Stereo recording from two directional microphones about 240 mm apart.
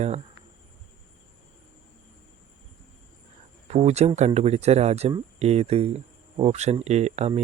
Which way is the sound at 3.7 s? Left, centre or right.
Right.